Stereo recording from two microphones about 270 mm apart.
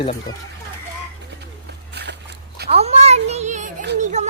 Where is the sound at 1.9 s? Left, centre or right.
Right.